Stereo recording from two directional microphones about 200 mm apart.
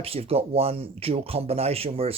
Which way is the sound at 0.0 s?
30° right (ahead or behind).